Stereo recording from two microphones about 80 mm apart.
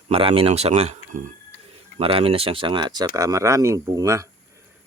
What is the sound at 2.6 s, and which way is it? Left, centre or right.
Speech, right.